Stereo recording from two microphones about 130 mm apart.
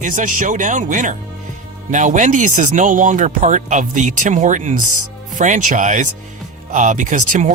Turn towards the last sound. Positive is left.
turn(degrees=-70)  # may be behind; listen again after turning